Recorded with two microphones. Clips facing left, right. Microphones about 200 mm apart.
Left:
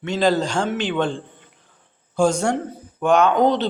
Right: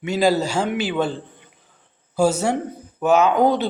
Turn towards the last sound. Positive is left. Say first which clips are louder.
# even
turn(degrees=-10)  # may be behind; listen again after turning